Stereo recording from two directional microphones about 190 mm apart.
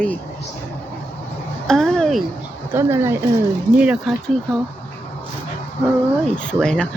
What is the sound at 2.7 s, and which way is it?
Speech, 15° right (ahead or behind).